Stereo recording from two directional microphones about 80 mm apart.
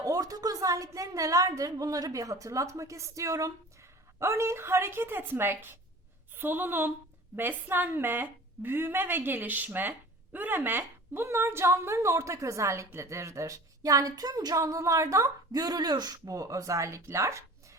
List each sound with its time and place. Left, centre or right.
0.0 s a woman's voice: right
14.6 s a woman's voice: right